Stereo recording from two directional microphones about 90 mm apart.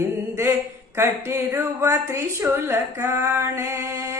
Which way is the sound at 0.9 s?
30° right (ahead or behind).